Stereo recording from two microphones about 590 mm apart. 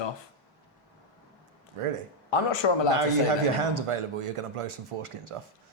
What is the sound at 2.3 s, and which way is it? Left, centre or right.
Speech, left.